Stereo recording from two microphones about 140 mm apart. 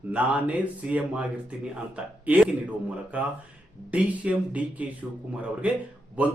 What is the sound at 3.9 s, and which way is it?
Speech, 10° right (ahead or behind).